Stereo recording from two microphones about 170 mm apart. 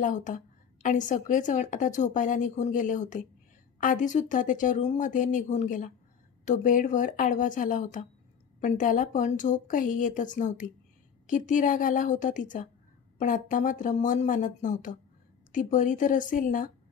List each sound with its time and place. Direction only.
0.0 s a woman's voice: 50° left (ahead or behind)